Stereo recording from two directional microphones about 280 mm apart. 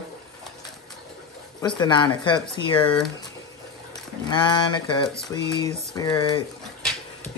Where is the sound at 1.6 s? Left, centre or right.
Centre.